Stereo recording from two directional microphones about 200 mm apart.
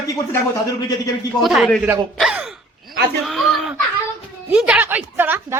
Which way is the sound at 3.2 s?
Centre (ahead or behind).